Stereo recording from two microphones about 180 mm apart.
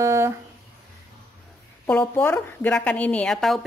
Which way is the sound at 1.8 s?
10° left (ahead or behind).